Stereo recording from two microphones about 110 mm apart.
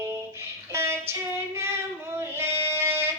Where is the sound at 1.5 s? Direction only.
25° right (ahead or behind).